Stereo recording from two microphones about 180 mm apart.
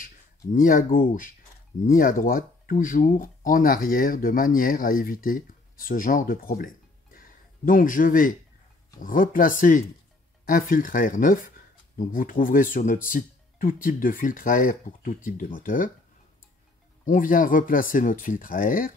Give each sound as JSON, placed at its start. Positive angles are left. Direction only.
{"t": 0.0, "sound": "speech", "side_deg": 50}
{"t": 17.0, "sound": "speech", "side_deg": 50}